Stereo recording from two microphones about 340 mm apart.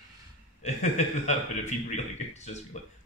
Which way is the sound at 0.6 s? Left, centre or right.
Left.